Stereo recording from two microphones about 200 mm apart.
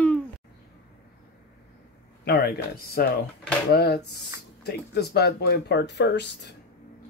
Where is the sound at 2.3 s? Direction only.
50° left (ahead or behind).